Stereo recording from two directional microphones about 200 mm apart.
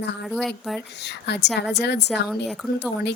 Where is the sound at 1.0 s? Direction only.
60° left (ahead or behind).